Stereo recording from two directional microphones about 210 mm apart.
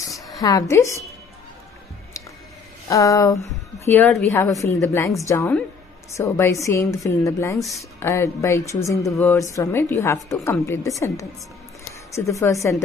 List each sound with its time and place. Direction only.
0.4 s speech: 15° left (ahead or behind)
2.9 s speech: 15° left (ahead or behind)
12.2 s speech: 15° left (ahead or behind)